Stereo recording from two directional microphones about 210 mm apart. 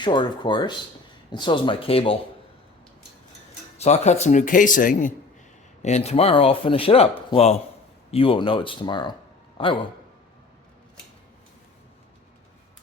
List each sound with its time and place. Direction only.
0.0 s speech: 20° left (ahead or behind)
3.8 s speech: 30° left (ahead or behind)